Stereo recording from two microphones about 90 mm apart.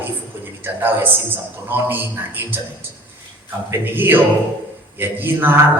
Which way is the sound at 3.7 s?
25° right (ahead or behind).